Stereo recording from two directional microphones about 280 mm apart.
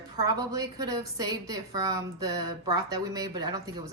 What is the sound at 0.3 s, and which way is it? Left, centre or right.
A woman's voice, centre.